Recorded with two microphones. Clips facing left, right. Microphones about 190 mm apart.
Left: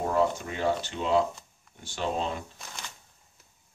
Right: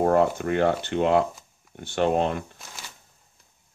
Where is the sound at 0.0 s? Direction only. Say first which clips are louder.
Right 6 dB; 60° right (ahead or behind).